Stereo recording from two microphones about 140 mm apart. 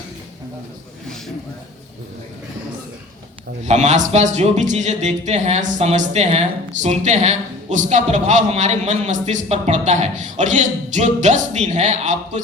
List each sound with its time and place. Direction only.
3.6 s a man's voice: 55° right (ahead or behind)